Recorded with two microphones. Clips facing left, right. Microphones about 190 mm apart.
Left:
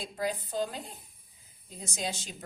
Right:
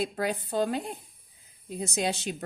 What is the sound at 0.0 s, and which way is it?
A woman's voice, 65° right (ahead or behind).